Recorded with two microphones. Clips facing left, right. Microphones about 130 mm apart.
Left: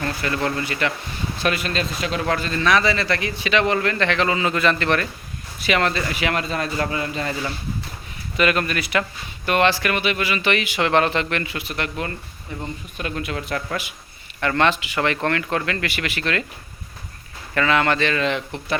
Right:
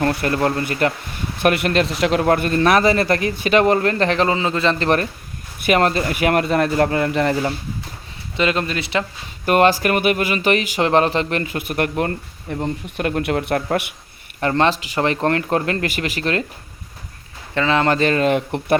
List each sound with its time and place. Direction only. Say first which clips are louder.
0.0 s speech: right 6 dB; 55° right (ahead or behind)
0.3 s speech: right 4 dB; 45° right (ahead or behind)
1.4 s speech: right 7 dB; 60° right (ahead or behind)
2.2 s speech: right 4 dB; 50° right (ahead or behind); by 4.9 s 25° right (ahead or behind)
5.5 s speech: right 4 dB; 45° right (ahead or behind)
8.4 s speech: right 1 dB; 25° right (ahead or behind)
9.5 s speech: right 4 dB; 45° right (ahead or behind); by 13.9 s 60° right (ahead or behind)
14.4 s speech: right 2 dB; 35° right (ahead or behind)
17.5 s speech: right 2 dB; 25° right (ahead or behind); by 18.8 s 55° right (ahead or behind)